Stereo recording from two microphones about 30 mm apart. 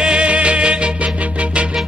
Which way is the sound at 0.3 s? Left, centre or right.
Right.